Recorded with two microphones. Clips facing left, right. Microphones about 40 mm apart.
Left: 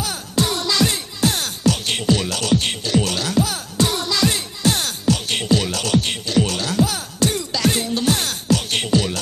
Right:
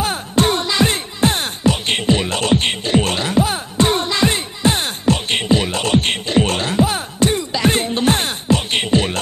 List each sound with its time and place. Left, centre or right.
0.0 s music: right